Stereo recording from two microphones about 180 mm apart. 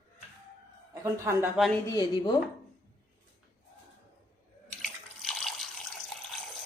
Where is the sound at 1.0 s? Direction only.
15° right (ahead or behind).